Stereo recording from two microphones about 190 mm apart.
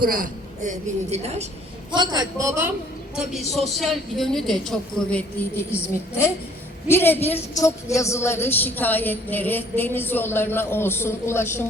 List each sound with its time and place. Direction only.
0.0 s a woman's voice: 45° right (ahead or behind)
1.9 s a man's voice: 20° right (ahead or behind)
3.2 s a woman's voice: centre (ahead or behind)
6.8 s a woman's voice: 10° left (ahead or behind)